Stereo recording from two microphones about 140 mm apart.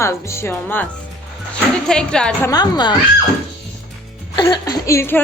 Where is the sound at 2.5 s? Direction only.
30° left (ahead or behind).